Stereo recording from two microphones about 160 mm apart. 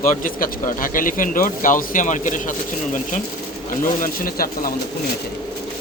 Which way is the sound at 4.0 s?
65° left (ahead or behind).